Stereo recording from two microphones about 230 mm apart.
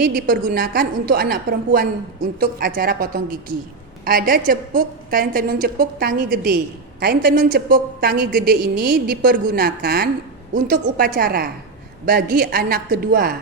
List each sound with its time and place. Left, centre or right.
0.0 s a woman's voice: right